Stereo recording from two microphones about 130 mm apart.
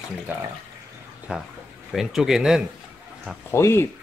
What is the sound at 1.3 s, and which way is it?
Speech, 10° right (ahead or behind).